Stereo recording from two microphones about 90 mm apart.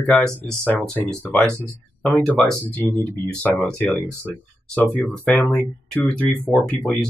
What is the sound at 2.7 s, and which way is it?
Speech, 20° left (ahead or behind).